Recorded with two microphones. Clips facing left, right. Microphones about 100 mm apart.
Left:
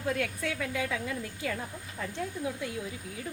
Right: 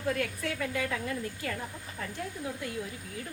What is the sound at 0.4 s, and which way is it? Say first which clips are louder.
A woman's voice: even; 15° left (ahead or behind).